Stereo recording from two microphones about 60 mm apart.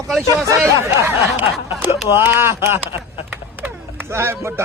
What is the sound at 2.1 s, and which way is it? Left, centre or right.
Speech, right.